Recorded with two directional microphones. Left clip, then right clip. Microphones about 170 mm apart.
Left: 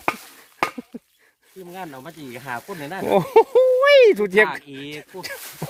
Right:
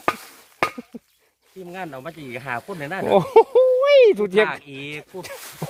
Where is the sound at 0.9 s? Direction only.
25° left (ahead or behind).